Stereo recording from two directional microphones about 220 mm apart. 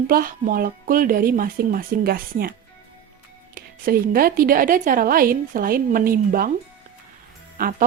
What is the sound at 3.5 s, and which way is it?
A woman's voice, 40° right (ahead or behind).